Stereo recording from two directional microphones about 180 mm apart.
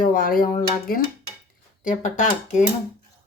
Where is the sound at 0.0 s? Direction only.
50° left (ahead or behind).